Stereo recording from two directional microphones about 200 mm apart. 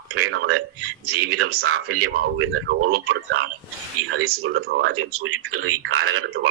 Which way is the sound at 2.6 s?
50° right (ahead or behind).